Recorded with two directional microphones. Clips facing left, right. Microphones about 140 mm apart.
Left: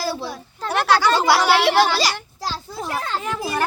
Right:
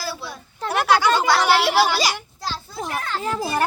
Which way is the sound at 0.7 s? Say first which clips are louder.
Even; 10° right (ahead or behind).